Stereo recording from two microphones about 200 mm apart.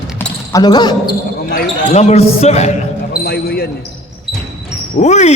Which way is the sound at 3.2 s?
50° left (ahead or behind).